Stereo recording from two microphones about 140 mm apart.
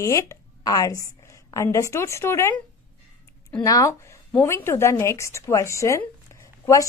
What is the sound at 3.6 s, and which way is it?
A woman's voice, 25° left (ahead or behind).